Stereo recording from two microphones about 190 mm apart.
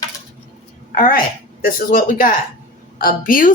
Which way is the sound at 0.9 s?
45° left (ahead or behind).